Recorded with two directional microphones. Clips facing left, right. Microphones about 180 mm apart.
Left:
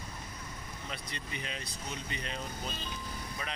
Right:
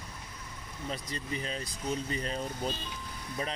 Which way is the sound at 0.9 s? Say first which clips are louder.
Right 7 dB; 35° right (ahead or behind).